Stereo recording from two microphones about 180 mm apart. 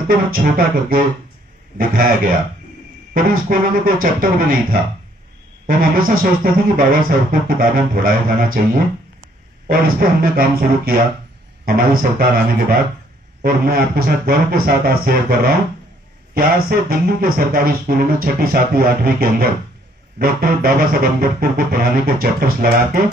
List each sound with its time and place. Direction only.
0.1 s music: 50° right (ahead or behind)
9.7 s speech: 55° right (ahead or behind)